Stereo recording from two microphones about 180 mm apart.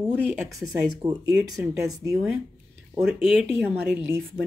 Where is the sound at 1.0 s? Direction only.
20° right (ahead or behind).